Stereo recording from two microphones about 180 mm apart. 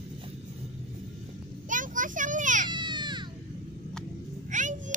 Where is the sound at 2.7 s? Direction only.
25° right (ahead or behind).